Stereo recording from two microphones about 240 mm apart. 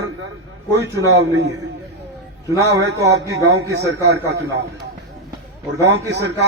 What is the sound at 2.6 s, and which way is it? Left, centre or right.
Speech, right.